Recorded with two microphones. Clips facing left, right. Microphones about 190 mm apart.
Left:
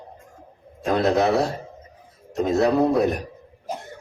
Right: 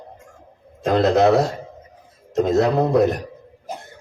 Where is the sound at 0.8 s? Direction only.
90° right.